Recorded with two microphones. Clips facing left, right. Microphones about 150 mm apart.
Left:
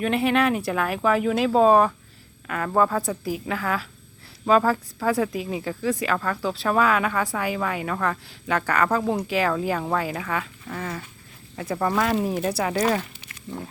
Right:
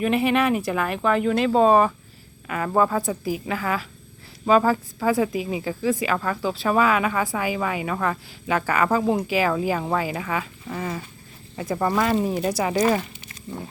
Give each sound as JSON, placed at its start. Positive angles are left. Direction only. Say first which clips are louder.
{"t": 0.0, "sound": "a woman's voice", "louder": "right 1 dB", "side_deg": 0}